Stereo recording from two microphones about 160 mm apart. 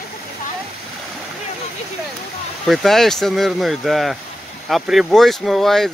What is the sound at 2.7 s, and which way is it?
Speech, centre (ahead or behind).